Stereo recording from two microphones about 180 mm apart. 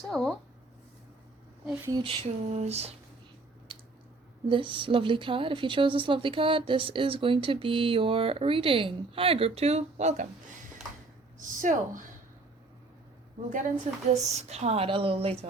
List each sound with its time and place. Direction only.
0.1 s speech: centre (ahead or behind)
2.0 s a woman's voice: 35° right (ahead or behind)
3.7 s squish: 25° right (ahead or behind)
4.4 s a woman's voice: 30° right (ahead or behind)
11.3 s speech: 45° right (ahead or behind)
13.5 s a woman's voice: 45° right (ahead or behind)